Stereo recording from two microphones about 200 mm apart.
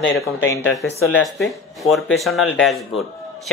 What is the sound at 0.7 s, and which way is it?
Speech, 5° left (ahead or behind).